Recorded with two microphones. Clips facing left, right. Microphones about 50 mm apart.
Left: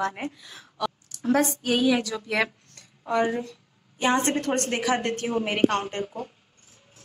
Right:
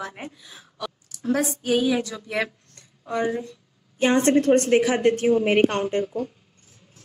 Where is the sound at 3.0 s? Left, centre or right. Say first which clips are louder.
Left 1 dB; left.